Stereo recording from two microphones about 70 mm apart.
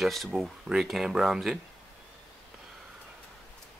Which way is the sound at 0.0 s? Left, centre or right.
Centre.